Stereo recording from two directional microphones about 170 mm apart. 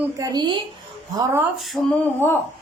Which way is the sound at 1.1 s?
15° right (ahead or behind).